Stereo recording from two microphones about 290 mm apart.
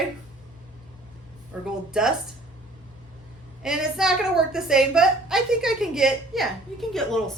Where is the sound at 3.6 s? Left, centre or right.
Centre.